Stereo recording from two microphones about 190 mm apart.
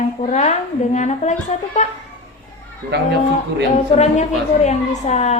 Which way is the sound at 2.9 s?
60° right (ahead or behind).